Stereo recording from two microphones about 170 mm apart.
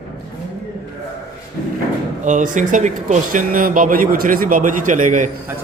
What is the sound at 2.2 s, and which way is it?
Speech, 50° right (ahead or behind).